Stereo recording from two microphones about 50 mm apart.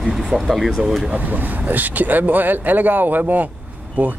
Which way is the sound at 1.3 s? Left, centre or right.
Right.